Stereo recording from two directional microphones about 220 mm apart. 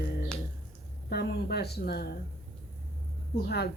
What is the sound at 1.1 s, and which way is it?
A woman's voice, 45° left (ahead or behind).